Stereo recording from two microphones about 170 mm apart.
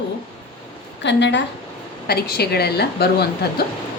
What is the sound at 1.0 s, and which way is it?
Speech, 90° left.